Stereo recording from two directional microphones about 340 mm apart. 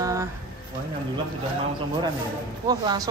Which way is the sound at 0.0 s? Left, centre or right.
Centre.